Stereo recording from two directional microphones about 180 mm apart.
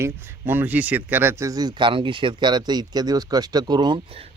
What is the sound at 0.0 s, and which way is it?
Speech, 10° right (ahead or behind).